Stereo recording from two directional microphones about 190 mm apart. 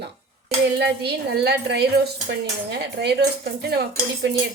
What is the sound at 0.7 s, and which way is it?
Dishes, 60° right (ahead or behind).